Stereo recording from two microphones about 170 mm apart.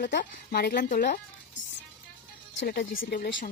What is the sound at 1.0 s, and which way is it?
Music, 90° left.